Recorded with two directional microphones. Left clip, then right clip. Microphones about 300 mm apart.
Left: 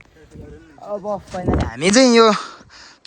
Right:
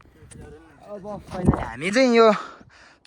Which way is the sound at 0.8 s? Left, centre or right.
Left.